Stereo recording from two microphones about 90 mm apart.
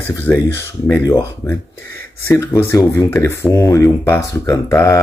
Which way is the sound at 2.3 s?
30° left (ahead or behind).